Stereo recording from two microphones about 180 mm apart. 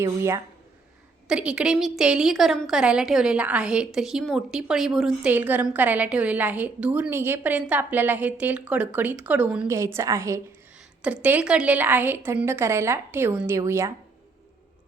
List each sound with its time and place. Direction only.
0.0 s a woman's voice: 15° right (ahead or behind)
1.3 s a woman's voice: 5° right (ahead or behind)